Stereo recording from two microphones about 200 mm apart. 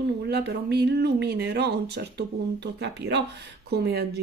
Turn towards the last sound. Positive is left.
turn(degrees=-55)  # may be behind; listen again after turning